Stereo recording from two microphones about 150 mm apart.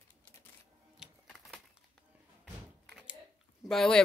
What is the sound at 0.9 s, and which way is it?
Typewriter, 5° right (ahead or behind).